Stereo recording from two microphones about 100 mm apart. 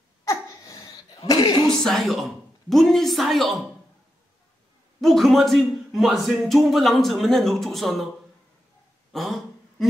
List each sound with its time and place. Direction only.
0.2 s cough: 35° left (ahead or behind)
1.7 s a man's voice: 5° left (ahead or behind)
5.0 s a man's voice: centre (ahead or behind)
9.1 s a sound: centre (ahead or behind)